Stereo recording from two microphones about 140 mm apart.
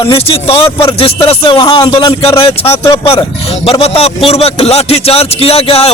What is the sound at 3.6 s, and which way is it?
A man's voice, 45° left (ahead or behind).